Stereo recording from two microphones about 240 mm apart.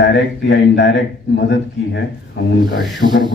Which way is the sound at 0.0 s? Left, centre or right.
Left.